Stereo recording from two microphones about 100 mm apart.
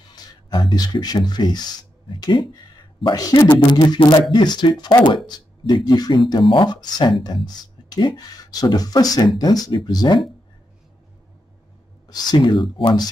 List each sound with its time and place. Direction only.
0.1 s speech: 45° left (ahead or behind)
12.1 s speech: 40° left (ahead or behind); by 12.9 s 60° left (ahead or behind)